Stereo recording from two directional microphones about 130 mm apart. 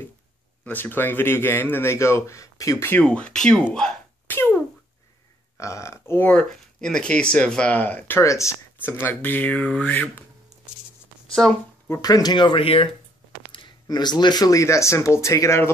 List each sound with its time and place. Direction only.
0.7 s a man's voice: 15° left (ahead or behind)
5.6 s speech: 20° left (ahead or behind)
6.3 s a man's voice: 5° left (ahead or behind)
8.2 s a man's voice: 25° left (ahead or behind)
12.0 s speech: 30° left (ahead or behind)